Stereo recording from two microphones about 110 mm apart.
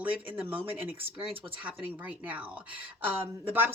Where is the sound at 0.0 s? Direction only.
15° right (ahead or behind).